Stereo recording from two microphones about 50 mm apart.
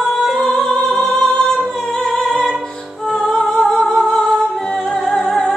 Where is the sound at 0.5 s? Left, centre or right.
Centre.